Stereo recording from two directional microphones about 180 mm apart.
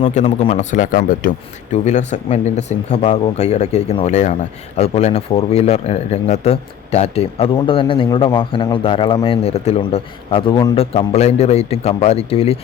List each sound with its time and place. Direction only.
0.0 s a man's voice: 40° left (ahead or behind)